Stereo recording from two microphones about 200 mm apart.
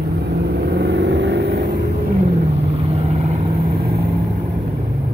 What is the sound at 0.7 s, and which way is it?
Vehicle, 55° right (ahead or behind).